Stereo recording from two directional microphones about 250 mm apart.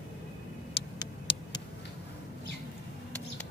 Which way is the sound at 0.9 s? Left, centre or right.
Centre.